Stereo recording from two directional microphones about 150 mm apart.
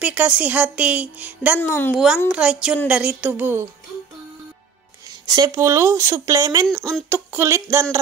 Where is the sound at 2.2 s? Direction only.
5° right (ahead or behind).